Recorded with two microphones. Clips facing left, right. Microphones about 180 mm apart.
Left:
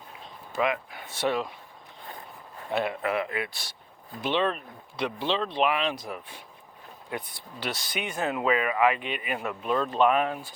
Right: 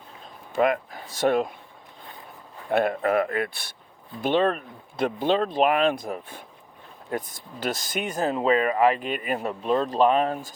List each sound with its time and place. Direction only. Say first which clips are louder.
0.5 s speech: right 5 dB; 45° right (ahead or behind)
2.6 s speech: right 6 dB; 50° right (ahead or behind)
4.2 s speech: right 5 dB; 45° right (ahead or behind)